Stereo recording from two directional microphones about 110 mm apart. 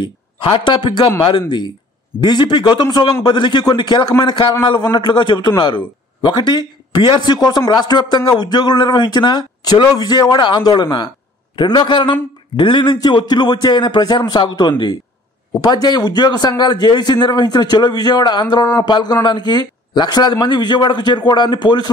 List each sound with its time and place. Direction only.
0.0 s speech: 50° left (ahead or behind)
2.1 s a man's voice: 40° left (ahead or behind)